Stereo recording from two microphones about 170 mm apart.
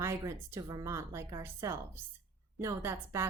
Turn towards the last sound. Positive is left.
turn(degrees=-15)  # may be behind; listen again after turning